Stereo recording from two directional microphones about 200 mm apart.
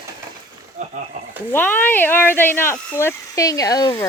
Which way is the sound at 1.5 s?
10° left (ahead or behind).